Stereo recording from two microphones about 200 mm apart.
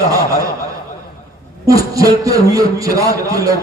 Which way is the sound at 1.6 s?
15° right (ahead or behind).